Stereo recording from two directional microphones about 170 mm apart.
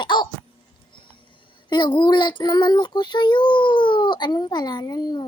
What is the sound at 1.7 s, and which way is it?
Child singing, 25° left (ahead or behind).